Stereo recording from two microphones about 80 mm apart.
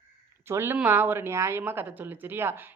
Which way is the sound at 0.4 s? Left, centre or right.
Right.